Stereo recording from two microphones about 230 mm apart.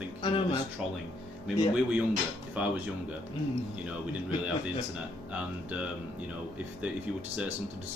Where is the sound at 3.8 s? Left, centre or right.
Centre.